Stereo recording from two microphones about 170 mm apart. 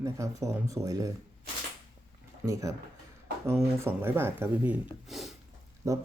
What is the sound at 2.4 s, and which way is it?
Speech, 20° right (ahead or behind).